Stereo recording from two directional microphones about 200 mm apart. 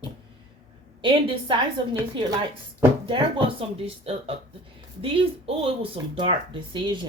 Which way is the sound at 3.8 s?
30° right (ahead or behind).